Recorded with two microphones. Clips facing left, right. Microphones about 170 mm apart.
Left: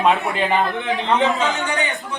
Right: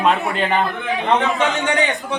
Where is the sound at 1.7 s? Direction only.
20° right (ahead or behind).